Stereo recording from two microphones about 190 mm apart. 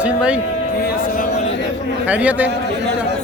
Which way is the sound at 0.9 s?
50° left (ahead or behind).